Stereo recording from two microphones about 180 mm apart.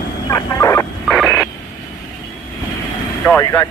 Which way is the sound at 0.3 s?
15° left (ahead or behind).